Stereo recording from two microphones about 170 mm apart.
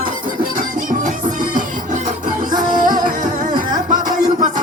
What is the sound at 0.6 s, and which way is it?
Music, 50° right (ahead or behind).